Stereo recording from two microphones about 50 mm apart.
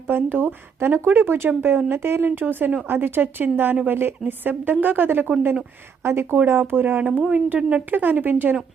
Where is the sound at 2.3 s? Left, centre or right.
Right.